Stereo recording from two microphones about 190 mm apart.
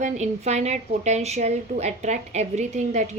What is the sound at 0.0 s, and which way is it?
A woman's voice, 35° right (ahead or behind).